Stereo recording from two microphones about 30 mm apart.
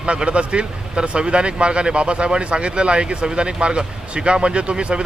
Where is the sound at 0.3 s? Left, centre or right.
Right.